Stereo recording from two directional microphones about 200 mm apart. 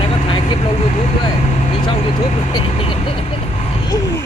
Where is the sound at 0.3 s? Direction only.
25° left (ahead or behind).